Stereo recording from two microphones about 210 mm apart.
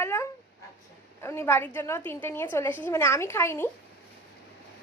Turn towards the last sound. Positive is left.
turn(degrees=10)  # may be behind; listen again after turning